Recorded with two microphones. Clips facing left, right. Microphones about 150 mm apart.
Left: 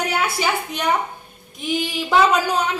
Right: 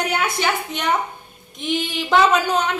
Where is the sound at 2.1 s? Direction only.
5° left (ahead or behind).